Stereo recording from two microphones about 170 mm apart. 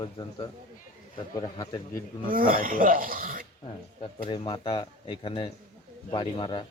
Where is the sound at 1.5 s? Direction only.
30° left (ahead or behind).